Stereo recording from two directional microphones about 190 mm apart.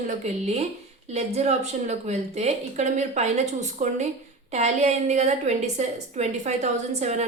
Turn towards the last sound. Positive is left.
turn(degrees=-35)  # may be behind; listen again after turning